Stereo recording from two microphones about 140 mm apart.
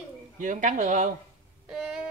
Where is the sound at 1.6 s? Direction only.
5° right (ahead or behind).